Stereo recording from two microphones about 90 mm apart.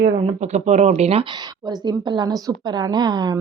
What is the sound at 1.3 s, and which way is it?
Speech, 50° right (ahead or behind).